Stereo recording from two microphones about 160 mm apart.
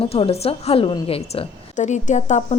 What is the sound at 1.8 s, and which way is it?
Speech, 50° left (ahead or behind).